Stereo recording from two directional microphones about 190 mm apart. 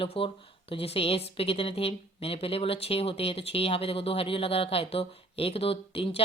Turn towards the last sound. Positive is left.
turn(degrees=30)  # may be behind; listen again after turning